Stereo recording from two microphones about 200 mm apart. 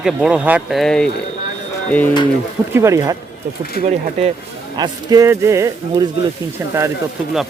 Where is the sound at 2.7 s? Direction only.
15° right (ahead or behind).